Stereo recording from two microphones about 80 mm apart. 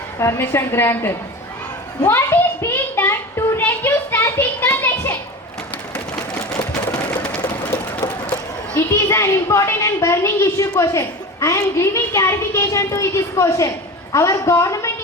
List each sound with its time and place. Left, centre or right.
0.2 s a woman's voice: left
3.6 s a sound: left
7.1 s sewing machine: centre
7.7 s a child's voice: left